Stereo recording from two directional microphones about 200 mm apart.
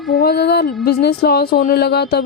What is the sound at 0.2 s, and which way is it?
Music, 55° left (ahead or behind).